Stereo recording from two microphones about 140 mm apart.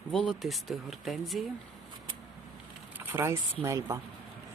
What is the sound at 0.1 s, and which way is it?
Speech, centre (ahead or behind).